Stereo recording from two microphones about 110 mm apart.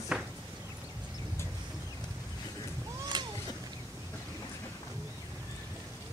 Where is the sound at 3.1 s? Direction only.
40° right (ahead or behind).